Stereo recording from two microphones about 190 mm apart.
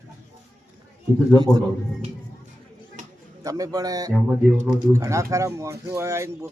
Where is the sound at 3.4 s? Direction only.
20° right (ahead or behind).